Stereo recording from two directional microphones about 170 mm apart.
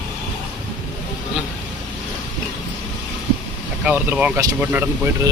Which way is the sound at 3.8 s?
10° right (ahead or behind).